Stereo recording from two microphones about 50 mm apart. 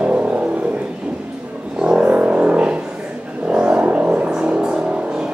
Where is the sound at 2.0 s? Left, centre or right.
Right.